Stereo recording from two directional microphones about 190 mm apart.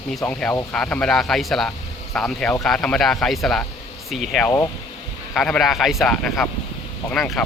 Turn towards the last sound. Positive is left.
turn(degrees=5)  # may be behind; listen again after turning